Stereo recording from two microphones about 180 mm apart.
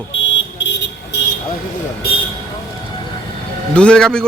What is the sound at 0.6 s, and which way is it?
Vehicle, 85° left.